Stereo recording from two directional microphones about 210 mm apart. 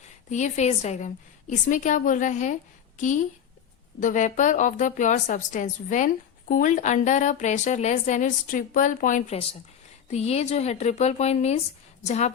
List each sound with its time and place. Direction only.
0.3 s a woman's voice: 35° left (ahead or behind)